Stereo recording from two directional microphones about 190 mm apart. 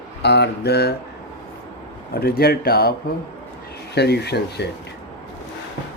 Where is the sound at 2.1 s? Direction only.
55° left (ahead or behind).